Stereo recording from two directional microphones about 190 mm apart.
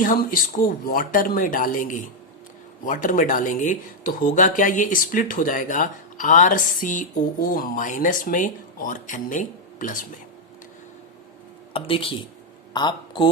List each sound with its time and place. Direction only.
0.0 s speech: 45° left (ahead or behind)
11.7 s speech: 30° left (ahead or behind)